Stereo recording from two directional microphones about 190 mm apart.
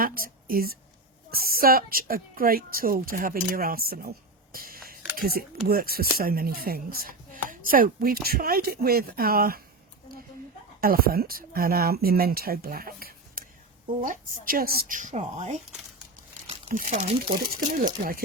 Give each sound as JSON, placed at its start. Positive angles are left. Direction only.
{"t": 0.0, "sound": "a woman's voice", "side_deg": -50}
{"t": 4.5, "sound": "a sound", "side_deg": -50}
{"t": 5.1, "sound": "speech", "side_deg": -55}
{"t": 10.8, "sound": "speech", "side_deg": -50}
{"t": 16.6, "sound": "speech", "side_deg": -45}
{"t": 17.2, "sound": "speech", "side_deg": -45}